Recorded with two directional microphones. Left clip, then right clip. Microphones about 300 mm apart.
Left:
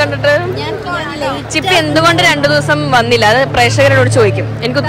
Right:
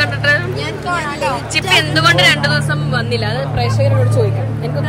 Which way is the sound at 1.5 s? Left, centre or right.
Centre.